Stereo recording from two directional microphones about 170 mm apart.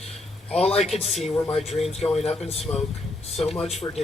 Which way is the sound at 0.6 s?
35° left (ahead or behind).